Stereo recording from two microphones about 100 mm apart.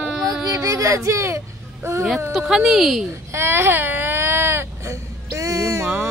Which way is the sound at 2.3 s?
5° right (ahead or behind).